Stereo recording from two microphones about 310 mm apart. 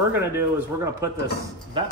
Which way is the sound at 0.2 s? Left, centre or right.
Centre.